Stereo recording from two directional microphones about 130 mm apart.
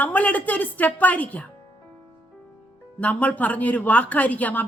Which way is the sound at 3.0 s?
10° left (ahead or behind).